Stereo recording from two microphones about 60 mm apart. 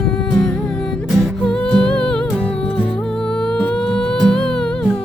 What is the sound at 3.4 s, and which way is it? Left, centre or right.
Music, centre.